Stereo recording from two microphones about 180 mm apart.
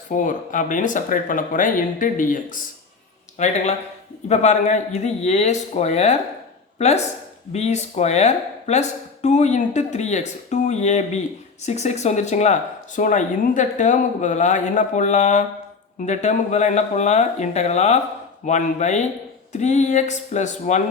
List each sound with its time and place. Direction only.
0.1 s speech: 45° left (ahead or behind)